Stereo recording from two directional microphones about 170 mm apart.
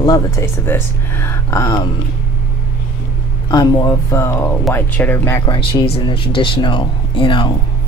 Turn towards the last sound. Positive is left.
turn(degrees=30)  # may be behind; listen again after turning